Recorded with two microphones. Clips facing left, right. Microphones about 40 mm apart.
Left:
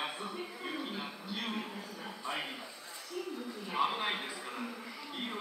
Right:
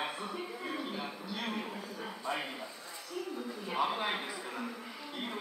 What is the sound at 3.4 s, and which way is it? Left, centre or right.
Speech, centre.